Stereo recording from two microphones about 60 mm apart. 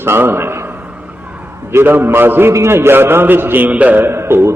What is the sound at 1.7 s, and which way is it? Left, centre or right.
A man's voice, right.